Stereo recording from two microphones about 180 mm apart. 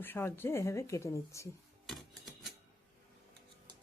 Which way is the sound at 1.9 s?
Centre (ahead or behind).